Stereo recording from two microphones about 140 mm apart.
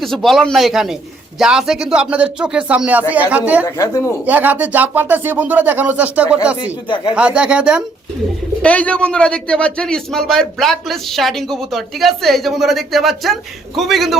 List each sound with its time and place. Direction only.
0.0 s a man's voice: centre (ahead or behind)
3.7 s speech: 25° left (ahead or behind)
4.3 s speech: 10° right (ahead or behind)
6.8 s speech: 35° left (ahead or behind)
7.2 s speech: 10° right (ahead or behind)
8.6 s a man's voice: 10° left (ahead or behind)